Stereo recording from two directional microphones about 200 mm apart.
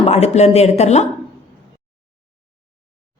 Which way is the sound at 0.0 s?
30° left (ahead or behind).